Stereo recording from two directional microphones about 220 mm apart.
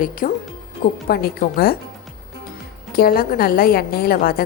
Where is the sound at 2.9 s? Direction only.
40° left (ahead or behind).